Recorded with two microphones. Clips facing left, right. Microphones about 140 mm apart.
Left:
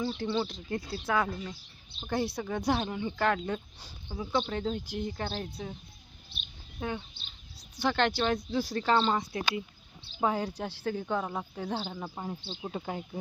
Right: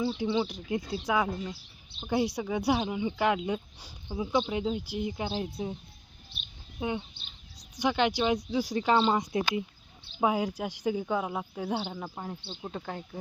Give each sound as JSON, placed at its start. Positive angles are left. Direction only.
{"t": 0.0, "sound": "speech", "side_deg": -15}
{"t": 6.7, "sound": "speech", "side_deg": -20}
{"t": 12.0, "sound": "speech", "side_deg": 5}